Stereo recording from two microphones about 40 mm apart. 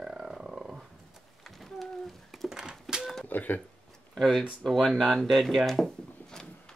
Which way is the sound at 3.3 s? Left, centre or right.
Left.